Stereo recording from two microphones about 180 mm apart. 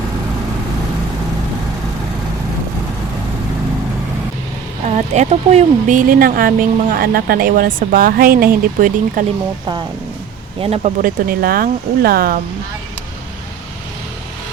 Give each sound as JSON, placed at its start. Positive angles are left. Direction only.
{"t": 4.9, "sound": "speech", "side_deg": -40}
{"t": 10.6, "sound": "speech", "side_deg": -35}